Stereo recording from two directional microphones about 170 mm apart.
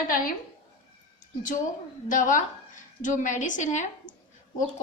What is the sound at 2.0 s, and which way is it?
A woman's voice, 50° left (ahead or behind).